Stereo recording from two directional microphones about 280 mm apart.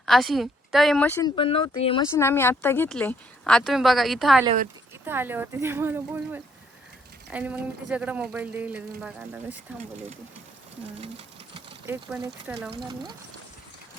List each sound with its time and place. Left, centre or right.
0.0 s speech: centre
2.1 s speech: centre
11.5 s a sound: centre
12.1 s speech: centre
12.7 s speech: centre